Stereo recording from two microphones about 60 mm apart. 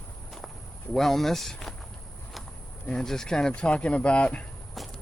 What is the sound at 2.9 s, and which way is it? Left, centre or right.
Speech, centre.